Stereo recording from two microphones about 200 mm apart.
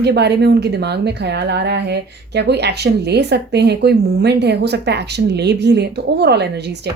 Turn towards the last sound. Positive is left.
turn(degrees=-55)  # may be behind; listen again after turning